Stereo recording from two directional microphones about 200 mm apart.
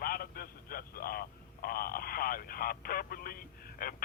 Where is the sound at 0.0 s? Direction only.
50° left (ahead or behind).